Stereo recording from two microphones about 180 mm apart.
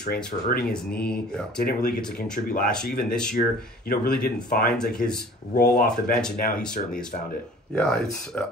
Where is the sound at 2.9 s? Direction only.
55° left (ahead or behind).